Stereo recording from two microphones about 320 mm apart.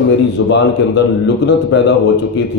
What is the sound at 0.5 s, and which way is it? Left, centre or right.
A man's voice, left.